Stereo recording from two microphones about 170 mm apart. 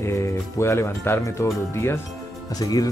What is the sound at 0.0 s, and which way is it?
Speech, 15° left (ahead or behind).